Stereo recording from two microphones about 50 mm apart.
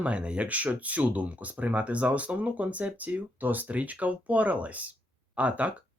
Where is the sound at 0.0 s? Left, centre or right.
Right.